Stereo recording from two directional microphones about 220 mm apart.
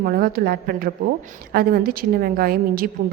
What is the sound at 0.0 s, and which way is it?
A woman's voice, 40° right (ahead or behind).